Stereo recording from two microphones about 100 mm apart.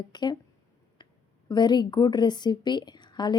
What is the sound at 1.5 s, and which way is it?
A woman's voice, 45° left (ahead or behind).